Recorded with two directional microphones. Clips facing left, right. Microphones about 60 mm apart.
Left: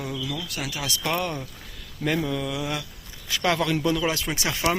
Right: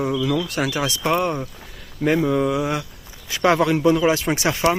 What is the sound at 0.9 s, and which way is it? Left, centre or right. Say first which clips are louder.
Speech: right 6 dB; right.